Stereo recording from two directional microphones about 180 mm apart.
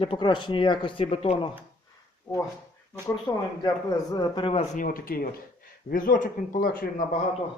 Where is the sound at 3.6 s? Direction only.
20° left (ahead or behind).